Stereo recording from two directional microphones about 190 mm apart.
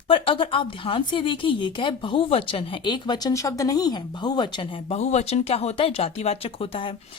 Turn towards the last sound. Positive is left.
turn(degrees=30)  # may be behind; listen again after turning